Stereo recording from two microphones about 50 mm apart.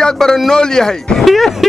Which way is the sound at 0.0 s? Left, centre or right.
Centre.